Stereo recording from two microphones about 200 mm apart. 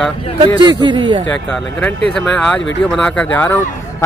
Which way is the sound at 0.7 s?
20° right (ahead or behind).